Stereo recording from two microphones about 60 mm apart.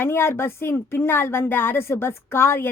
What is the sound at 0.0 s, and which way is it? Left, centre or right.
A woman's voice, left.